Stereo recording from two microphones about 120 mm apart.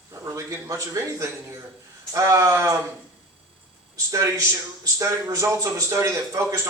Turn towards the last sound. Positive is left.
turn(degrees=-25)  # may be behind; listen again after turning